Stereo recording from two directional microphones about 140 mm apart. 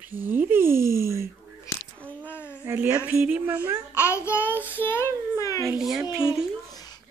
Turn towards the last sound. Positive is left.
turn(degrees=25)  # may be behind; listen again after turning